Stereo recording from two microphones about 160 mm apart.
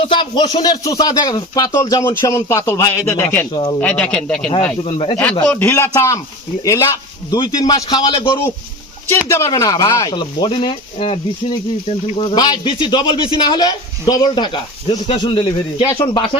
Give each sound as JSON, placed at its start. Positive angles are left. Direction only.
{"t": 0.0, "sound": "speech", "side_deg": 30}
{"t": 0.6, "sound": "speech", "side_deg": 25}
{"t": 3.5, "sound": "speech", "side_deg": 25}
{"t": 3.8, "sound": "a man's voice", "side_deg": 5}
{"t": 9.0, "sound": "speech", "side_deg": 15}
{"t": 15.9, "sound": "speech", "side_deg": 20}